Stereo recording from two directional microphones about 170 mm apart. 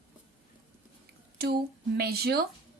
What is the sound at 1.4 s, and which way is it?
Speech, 65° right (ahead or behind).